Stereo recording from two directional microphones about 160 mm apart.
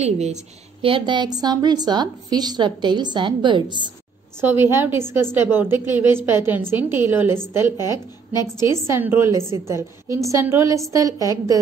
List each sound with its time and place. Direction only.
0.0 s a woman's voice: 45° right (ahead or behind)
0.8 s a woman's voice: 30° right (ahead or behind)
4.4 s a woman's voice: 15° right (ahead or behind)